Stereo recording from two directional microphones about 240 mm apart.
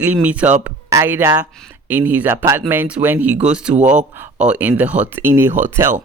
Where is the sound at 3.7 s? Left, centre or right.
Right.